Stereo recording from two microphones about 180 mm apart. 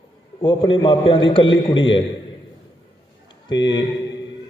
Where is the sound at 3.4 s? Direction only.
25° left (ahead or behind).